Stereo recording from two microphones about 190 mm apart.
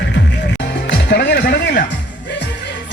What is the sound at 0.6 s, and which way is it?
Music, 65° left (ahead or behind).